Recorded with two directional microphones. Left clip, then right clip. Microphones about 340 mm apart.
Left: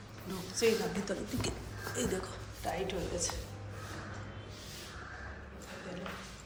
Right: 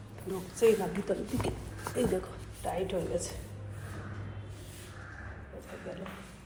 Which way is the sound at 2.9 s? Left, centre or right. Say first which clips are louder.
Right 3 dB; centre.